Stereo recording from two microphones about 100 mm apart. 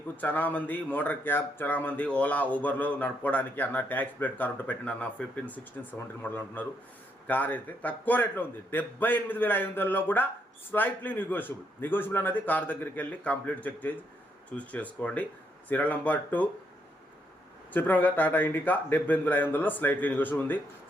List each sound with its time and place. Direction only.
0.2 s a man's voice: 15° left (ahead or behind)
17.7 s speech: 20° left (ahead or behind)